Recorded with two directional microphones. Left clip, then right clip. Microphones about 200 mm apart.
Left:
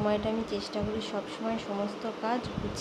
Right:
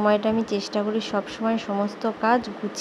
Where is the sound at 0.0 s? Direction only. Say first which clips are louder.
Right 8 dB; 25° right (ahead or behind).